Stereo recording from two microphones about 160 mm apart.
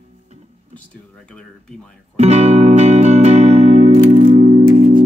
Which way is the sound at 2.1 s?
45° right (ahead or behind).